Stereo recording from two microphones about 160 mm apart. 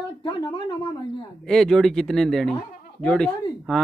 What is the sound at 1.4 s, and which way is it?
A man's voice, 5° left (ahead or behind).